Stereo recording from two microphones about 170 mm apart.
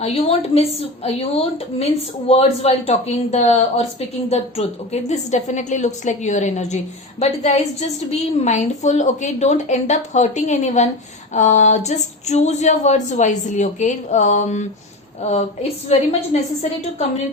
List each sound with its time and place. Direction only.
0.0 s a woman's voice: 35° left (ahead or behind)